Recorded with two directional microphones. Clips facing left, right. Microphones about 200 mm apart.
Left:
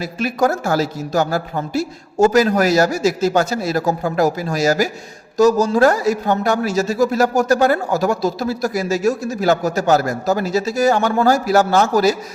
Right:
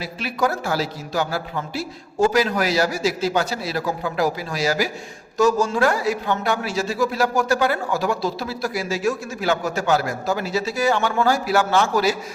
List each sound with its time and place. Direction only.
0.0 s a man's voice: 45° left (ahead or behind)